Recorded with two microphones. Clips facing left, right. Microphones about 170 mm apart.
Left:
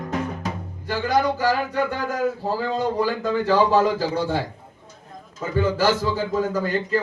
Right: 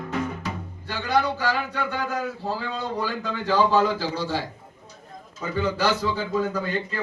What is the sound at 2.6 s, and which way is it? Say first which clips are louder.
A man's voice: left 10 dB; 45° left (ahead or behind).